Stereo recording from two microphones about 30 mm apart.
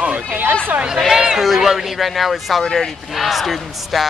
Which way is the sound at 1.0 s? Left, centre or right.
Centre.